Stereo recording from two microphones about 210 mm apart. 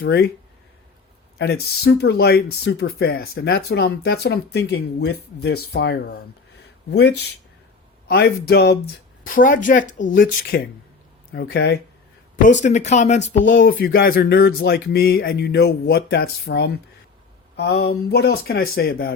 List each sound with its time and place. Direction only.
0.0 s speech: 50° left (ahead or behind)
1.4 s speech: 50° left (ahead or behind)
8.0 s speech: 50° left (ahead or behind)
9.2 s speech: 40° left (ahead or behind)
12.5 s speech: 35° left (ahead or behind)